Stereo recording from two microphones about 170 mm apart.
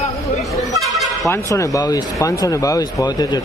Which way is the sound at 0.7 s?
Centre (ahead or behind).